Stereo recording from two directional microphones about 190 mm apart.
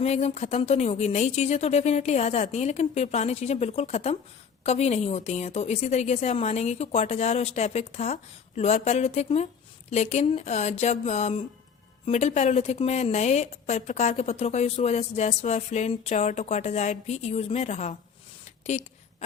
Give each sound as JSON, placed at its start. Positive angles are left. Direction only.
{"t": 0.0, "sound": "a woman's voice", "side_deg": 35}